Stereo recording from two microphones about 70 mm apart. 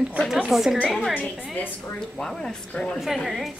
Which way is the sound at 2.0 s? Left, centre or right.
Centre.